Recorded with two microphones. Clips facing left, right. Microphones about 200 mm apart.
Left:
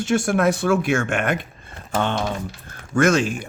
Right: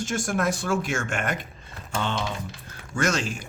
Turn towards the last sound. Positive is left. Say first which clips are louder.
# left 8 dB
turn(degrees=55)  # may be behind; listen again after turning